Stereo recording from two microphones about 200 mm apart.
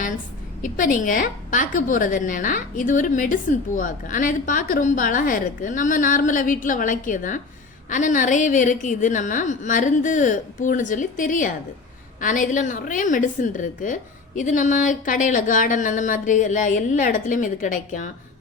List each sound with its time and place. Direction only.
0.6 s a woman's voice: 40° left (ahead or behind)